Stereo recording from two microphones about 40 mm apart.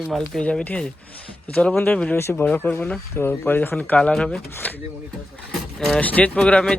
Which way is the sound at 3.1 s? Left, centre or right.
Left.